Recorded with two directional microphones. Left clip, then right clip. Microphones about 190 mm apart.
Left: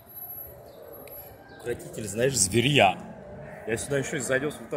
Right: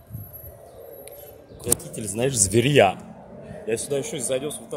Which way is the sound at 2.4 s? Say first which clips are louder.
Right 4 dB; 45° right (ahead or behind).